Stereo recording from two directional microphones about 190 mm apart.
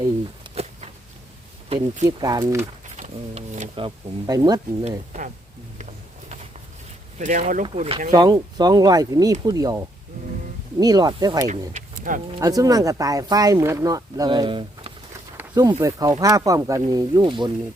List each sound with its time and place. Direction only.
0.5 s a sound: 35° right (ahead or behind)
2.0 s speech: 20° right (ahead or behind)
2.9 s speech: 35° right (ahead or behind); by 4.9 s 20° right (ahead or behind)
4.9 s speech: 40° right (ahead or behind)
5.7 s a sound: 40° right (ahead or behind)
7.2 s speech: 40° right (ahead or behind)
8.1 s speech: 20° right (ahead or behind)
11.7 s a sound: 45° right (ahead or behind)
12.4 s speech: 20° right (ahead or behind)
15.4 s snake: 20° right (ahead or behind)
15.8 s speech: 20° right (ahead or behind)